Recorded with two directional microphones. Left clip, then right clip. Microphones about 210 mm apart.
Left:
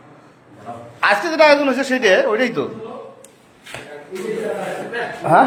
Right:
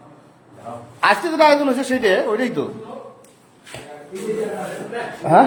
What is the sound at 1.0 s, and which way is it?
Speech, 20° right (ahead or behind).